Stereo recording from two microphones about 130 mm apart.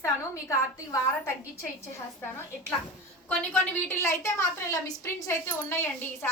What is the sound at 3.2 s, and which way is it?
A woman's voice, 15° left (ahead or behind).